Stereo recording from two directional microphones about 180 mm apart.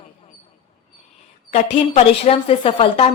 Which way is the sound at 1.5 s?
35° left (ahead or behind).